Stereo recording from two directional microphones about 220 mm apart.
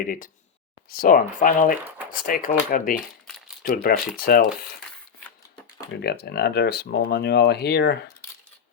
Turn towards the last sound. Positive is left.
turn(degrees=50)  # may be behind; listen again after turning